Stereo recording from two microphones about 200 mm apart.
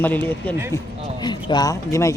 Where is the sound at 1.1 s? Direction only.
20° left (ahead or behind).